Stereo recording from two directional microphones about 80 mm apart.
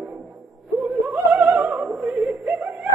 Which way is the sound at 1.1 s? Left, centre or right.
Right.